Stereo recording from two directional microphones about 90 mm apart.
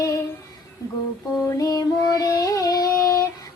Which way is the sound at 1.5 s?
45° left (ahead or behind).